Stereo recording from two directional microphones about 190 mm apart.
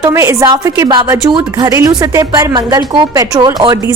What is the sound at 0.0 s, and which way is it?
A woman's voice, 15° right (ahead or behind).